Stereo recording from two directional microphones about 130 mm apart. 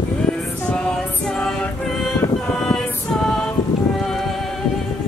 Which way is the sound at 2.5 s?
5° left (ahead or behind).